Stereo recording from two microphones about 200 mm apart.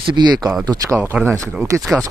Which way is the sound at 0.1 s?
20° right (ahead or behind).